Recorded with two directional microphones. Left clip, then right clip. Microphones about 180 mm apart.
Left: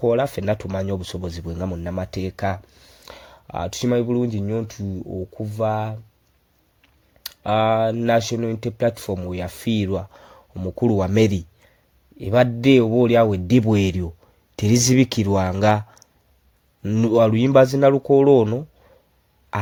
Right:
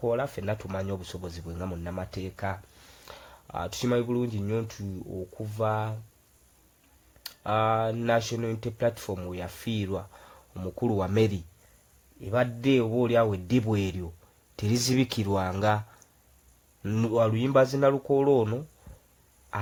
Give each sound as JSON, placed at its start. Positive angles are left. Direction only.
{"t": 0.0, "sound": "speech", "side_deg": 35}
{"t": 7.2, "sound": "speech", "side_deg": 30}
{"t": 12.2, "sound": "speech", "side_deg": 40}
{"t": 16.8, "sound": "speech", "side_deg": 15}
{"t": 17.1, "sound": "speech", "side_deg": 35}